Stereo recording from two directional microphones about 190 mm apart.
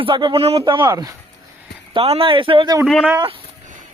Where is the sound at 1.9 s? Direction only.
30° right (ahead or behind).